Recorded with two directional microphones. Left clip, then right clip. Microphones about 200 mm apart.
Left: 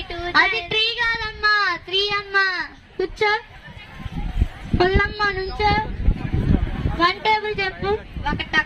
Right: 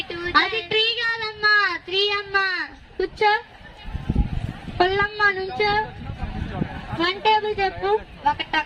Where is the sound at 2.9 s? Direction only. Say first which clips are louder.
Right 1 dB; 55° left (ahead or behind).